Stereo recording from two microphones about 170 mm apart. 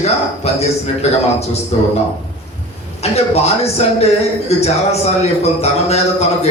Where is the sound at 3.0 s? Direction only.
40° left (ahead or behind).